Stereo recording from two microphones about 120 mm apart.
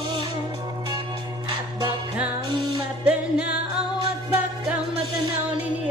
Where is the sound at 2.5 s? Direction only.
40° right (ahead or behind).